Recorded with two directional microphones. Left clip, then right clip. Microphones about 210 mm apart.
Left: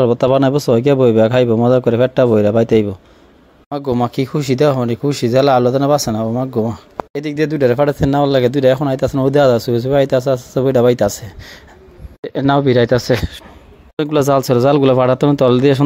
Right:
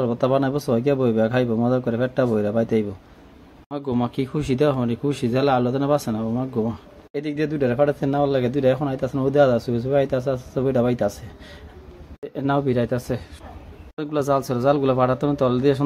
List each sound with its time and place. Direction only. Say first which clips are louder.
0.0 s speech: left 8 dB; 40° left (ahead or behind)